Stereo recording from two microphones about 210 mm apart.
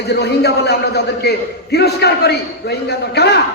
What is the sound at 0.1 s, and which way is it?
A man's voice, 50° left (ahead or behind).